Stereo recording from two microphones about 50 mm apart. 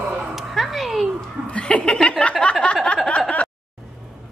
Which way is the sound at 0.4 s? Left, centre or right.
Centre.